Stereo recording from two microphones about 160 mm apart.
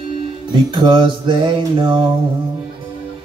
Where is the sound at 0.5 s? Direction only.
30° right (ahead or behind).